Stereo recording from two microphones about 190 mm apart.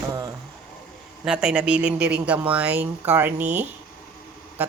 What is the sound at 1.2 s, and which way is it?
Speech, 5° right (ahead or behind).